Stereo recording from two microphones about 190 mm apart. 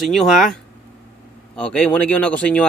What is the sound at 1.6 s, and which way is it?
Speech, 5° left (ahead or behind).